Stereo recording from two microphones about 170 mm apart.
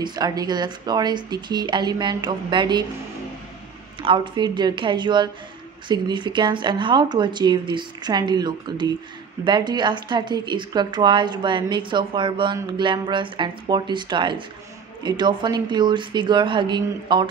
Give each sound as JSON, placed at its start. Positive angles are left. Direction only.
{"t": 0.0, "sound": "speech", "side_deg": -25}
{"t": 4.0, "sound": "speech", "side_deg": -30}